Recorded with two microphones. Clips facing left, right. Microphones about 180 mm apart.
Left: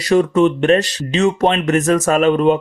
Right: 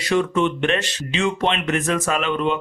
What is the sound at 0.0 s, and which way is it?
Speech, 40° left (ahead or behind).